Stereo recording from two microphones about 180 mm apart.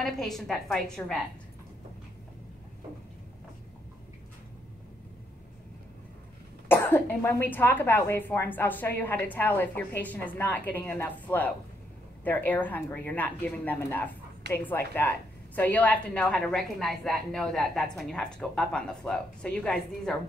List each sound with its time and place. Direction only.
0.0 s a woman's voice: centre (ahead or behind)
6.7 s a woman's voice: 10° left (ahead or behind)